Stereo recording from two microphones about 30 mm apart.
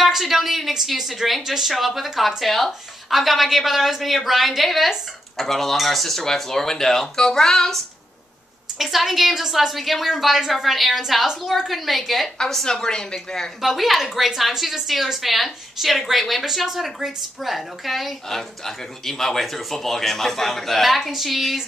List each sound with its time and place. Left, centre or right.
0.1 s a woman's voice: centre
8.7 s a woman's voice: centre
12.6 s speech: centre
13.6 s a woman's voice: centre
18.3 s speech: centre